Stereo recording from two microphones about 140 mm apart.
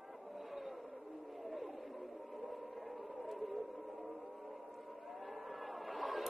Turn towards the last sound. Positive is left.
turn(degrees=0)  # may be behind; listen again after turning